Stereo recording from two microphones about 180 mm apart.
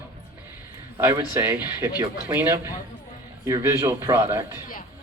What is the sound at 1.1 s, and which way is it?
Speech, 15° right (ahead or behind).